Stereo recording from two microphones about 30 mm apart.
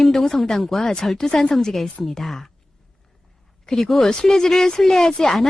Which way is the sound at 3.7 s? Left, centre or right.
Left.